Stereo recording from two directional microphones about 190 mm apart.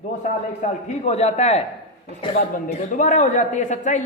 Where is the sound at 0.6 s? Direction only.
35° left (ahead or behind).